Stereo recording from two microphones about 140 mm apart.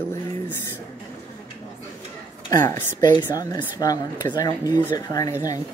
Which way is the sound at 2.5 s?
30° left (ahead or behind).